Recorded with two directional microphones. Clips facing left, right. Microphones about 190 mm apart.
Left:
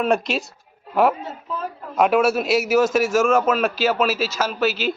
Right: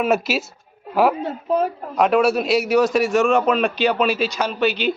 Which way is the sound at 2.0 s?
Centre (ahead or behind).